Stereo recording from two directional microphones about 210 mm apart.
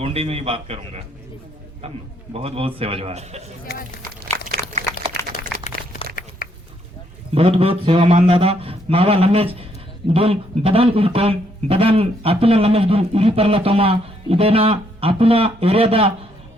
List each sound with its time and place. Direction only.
0.0 s speech: 30° right (ahead or behind)
2.3 s speech: 30° right (ahead or behind)
5.6 s a sound: 35° left (ahead or behind)
7.3 s speech: 25° right (ahead or behind)